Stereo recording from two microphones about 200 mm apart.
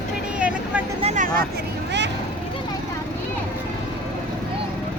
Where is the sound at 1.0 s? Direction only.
35° right (ahead or behind).